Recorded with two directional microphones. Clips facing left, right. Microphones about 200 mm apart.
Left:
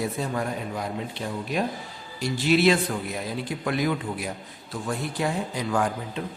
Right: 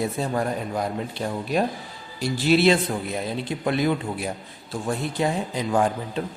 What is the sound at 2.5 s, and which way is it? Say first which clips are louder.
A man's voice: right 2 dB; 30° right (ahead or behind).